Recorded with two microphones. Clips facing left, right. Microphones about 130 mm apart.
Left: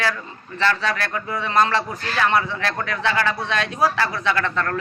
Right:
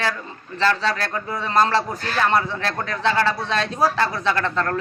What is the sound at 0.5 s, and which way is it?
A man's voice, 30° right (ahead or behind).